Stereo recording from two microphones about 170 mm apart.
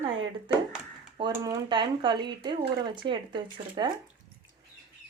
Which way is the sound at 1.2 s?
25° right (ahead or behind).